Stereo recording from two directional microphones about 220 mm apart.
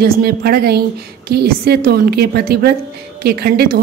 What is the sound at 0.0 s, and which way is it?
A woman's voice, 45° right (ahead or behind).